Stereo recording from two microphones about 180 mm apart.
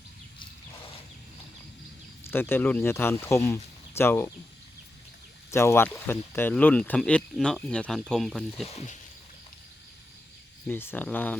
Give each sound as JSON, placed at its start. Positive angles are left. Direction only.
{"t": 2.2, "sound": "speech", "side_deg": 10}
{"t": 5.5, "sound": "speech", "side_deg": 15}
{"t": 8.6, "sound": "speech", "side_deg": 40}
{"t": 10.7, "sound": "speech", "side_deg": 10}